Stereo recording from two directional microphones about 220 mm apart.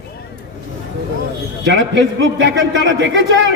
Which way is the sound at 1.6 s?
55° right (ahead or behind).